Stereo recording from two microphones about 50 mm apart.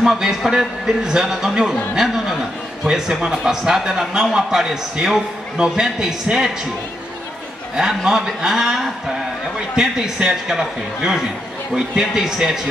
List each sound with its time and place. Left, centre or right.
0.0 s a man's voice: centre
7.7 s a man's voice: centre